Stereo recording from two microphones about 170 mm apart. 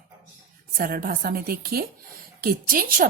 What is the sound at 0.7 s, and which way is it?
Speech, 60° right (ahead or behind).